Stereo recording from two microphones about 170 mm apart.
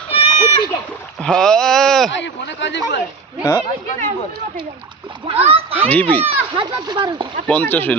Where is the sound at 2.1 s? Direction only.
90° left.